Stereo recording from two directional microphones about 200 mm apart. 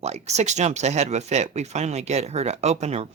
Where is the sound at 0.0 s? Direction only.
35° right (ahead or behind).